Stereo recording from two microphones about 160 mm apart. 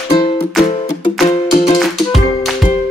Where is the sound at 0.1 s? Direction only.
35° left (ahead or behind).